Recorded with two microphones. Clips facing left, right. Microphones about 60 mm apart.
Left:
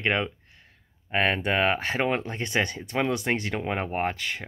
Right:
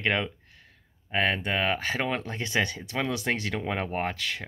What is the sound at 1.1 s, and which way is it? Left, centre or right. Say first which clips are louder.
Speech: left 2 dB; left.